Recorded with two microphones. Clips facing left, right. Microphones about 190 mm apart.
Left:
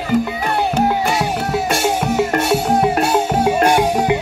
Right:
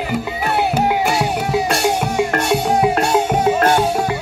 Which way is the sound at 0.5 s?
10° right (ahead or behind).